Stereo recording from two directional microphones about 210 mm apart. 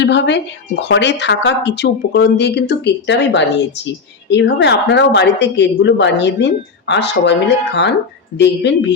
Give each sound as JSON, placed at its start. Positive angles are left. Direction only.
{"t": 0.0, "sound": "a woman's voice", "side_deg": 55}